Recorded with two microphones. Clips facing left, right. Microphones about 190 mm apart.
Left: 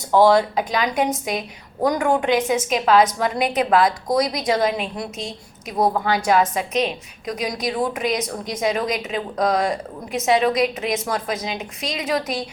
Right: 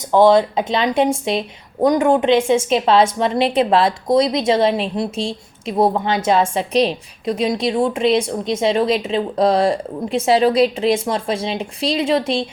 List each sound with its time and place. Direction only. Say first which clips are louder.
0.1 s a woman's voice: right 3 dB; 20° right (ahead or behind)